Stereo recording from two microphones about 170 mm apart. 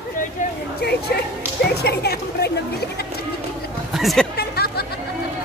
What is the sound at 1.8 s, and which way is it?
Speech, 70° left (ahead or behind).